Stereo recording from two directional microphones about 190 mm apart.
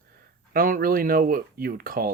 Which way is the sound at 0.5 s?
50° right (ahead or behind).